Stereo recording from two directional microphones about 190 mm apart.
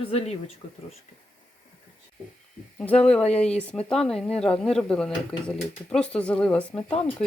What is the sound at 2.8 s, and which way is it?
Speech, 5° left (ahead or behind).